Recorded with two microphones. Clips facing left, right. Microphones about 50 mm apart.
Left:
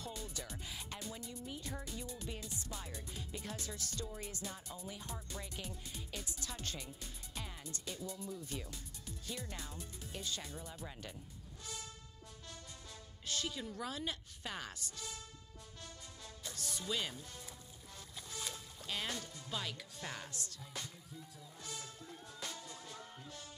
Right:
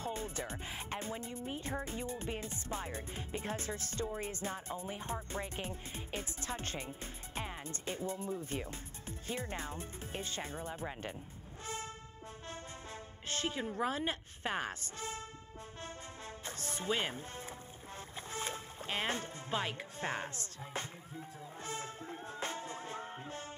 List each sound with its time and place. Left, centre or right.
0.0 s speech: right
11.6 s vehicle: right
13.3 s speech: right
16.4 s speech: right
18.3 s speech: right
21.6 s music: right